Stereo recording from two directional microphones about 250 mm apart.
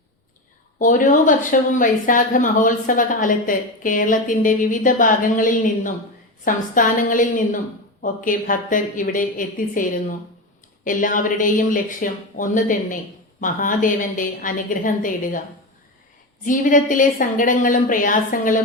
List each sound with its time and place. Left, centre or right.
0.8 s speech: left
16.5 s speech: left